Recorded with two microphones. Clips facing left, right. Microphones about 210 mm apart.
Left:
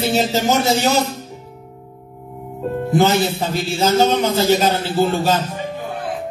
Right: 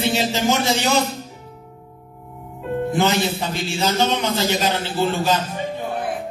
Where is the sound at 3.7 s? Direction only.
40° left (ahead or behind).